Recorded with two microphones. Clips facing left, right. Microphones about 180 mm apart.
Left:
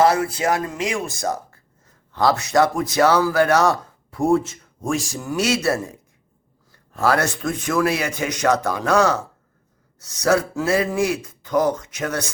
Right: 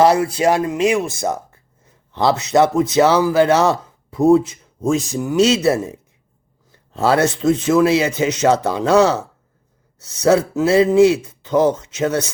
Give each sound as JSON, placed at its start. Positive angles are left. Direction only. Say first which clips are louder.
{"t": 0.0, "sound": "speech", "louder": "right 4 dB", "side_deg": -25}